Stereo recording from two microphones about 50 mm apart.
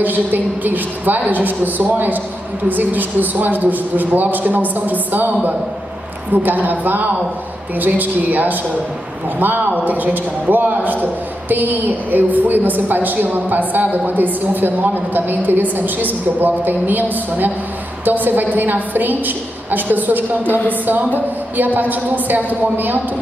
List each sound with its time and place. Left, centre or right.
0.0 s a woman's voice: right